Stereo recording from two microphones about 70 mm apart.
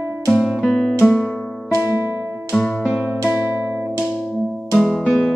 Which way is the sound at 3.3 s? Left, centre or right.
Right.